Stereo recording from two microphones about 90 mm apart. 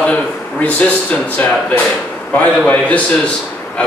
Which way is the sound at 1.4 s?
20° left (ahead or behind).